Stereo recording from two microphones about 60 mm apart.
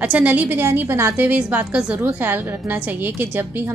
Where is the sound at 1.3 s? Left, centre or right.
Right.